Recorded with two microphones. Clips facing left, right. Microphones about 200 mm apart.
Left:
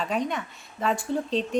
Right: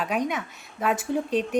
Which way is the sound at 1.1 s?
15° right (ahead or behind).